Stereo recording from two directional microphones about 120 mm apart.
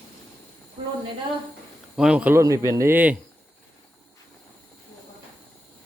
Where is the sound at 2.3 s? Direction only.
25° right (ahead or behind).